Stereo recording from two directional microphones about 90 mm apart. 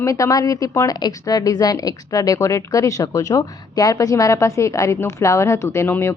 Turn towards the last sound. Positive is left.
turn(degrees=30)  # may be behind; listen again after turning